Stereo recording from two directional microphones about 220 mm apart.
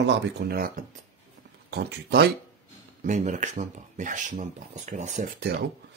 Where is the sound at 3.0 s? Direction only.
35° right (ahead or behind).